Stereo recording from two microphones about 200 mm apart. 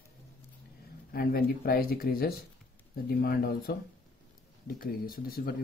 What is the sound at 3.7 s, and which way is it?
Speech, 50° left (ahead or behind).